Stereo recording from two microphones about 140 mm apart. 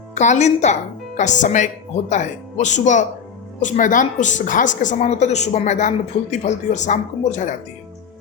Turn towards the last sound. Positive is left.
turn(degrees=60)  # may be behind; listen again after turning